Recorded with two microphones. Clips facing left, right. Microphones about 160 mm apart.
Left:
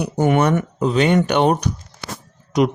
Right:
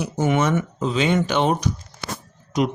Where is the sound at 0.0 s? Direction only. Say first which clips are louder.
Left 4 dB; 60° left (ahead or behind).